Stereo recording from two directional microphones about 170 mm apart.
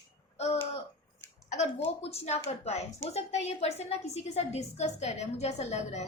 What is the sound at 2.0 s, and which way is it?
Speech, 35° left (ahead or behind).